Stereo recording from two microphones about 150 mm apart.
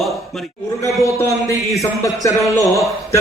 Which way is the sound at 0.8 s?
20° left (ahead or behind).